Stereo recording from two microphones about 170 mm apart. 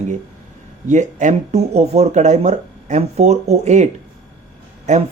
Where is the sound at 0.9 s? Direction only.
45° right (ahead or behind).